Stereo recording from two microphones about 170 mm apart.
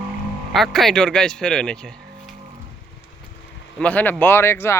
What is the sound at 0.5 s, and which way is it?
Speech, centre (ahead or behind).